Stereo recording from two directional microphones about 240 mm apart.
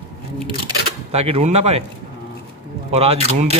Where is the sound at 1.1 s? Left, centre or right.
Right.